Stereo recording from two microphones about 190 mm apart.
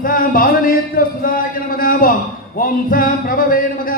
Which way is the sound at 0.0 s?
45° left (ahead or behind).